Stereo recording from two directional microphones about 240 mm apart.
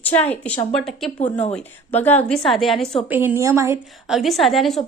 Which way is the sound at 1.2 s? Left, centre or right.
Left.